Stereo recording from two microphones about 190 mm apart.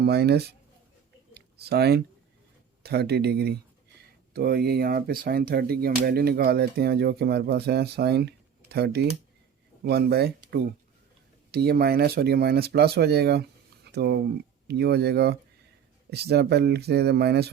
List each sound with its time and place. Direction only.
0.0 s speech: 55° right (ahead or behind)
1.3 s a sound: 60° right (ahead or behind)
2.8 s speech: 60° right (ahead or behind)